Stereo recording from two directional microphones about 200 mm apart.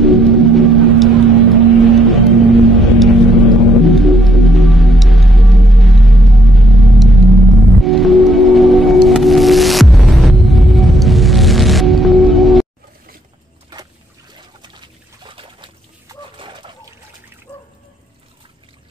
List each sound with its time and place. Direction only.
0.0 s vehicle: centre (ahead or behind)
3.8 s music: centre (ahead or behind)
14.3 s trickle: 25° right (ahead or behind)
16.3 s a sound: 25° right (ahead or behind)
17.5 s water: 5° left (ahead or behind)